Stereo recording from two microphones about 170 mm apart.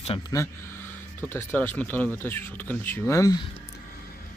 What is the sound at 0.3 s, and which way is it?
Speech, 15° left (ahead or behind).